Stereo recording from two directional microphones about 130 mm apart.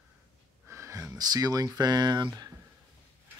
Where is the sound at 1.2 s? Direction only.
30° right (ahead or behind).